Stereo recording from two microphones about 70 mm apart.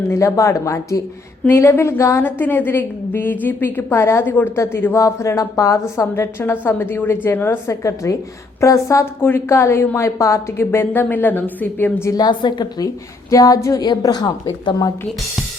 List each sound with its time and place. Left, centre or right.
0.1 s a woman's voice: left
2.2 s a woman's voice: left
4.9 s speech: left
6.4 s a woman's voice: left
7.7 s a woman's voice: left
12.1 s a woman's voice: left
13.3 s speech: left
13.7 s a woman's voice: left